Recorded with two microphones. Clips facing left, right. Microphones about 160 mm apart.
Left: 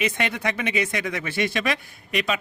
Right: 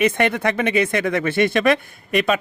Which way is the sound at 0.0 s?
55° right (ahead or behind).